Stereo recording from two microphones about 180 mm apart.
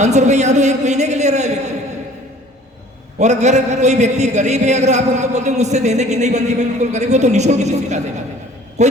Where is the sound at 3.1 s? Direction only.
40° right (ahead or behind).